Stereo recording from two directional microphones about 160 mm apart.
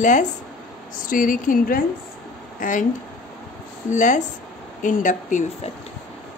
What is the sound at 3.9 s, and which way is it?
A woman's voice, 50° left (ahead or behind).